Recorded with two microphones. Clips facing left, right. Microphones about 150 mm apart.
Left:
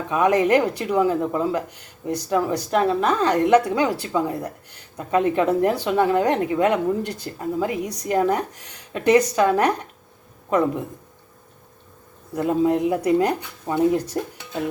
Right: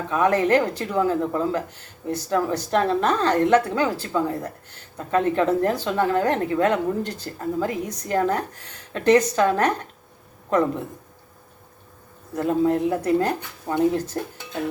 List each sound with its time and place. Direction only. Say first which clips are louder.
0.1 s speech: left 1 dB; 15° left (ahead or behind)
12.3 s speech: left 1 dB; 15° left (ahead or behind)